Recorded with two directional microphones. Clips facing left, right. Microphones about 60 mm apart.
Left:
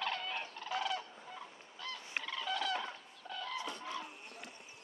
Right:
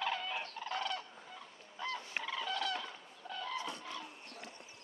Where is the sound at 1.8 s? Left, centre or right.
Right.